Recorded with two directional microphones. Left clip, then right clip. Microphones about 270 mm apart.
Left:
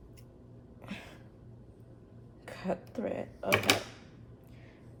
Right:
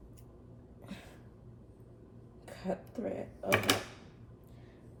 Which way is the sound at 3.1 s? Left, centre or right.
Centre.